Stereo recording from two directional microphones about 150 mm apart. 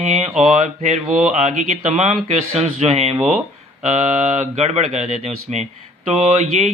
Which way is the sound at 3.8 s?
50° right (ahead or behind).